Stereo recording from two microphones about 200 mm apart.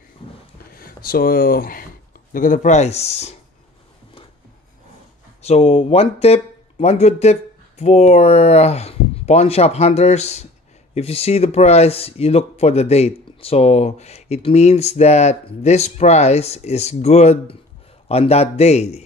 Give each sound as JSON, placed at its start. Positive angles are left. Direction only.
{"t": 0.7, "sound": "speech", "side_deg": 45}
{"t": 5.4, "sound": "speech", "side_deg": 30}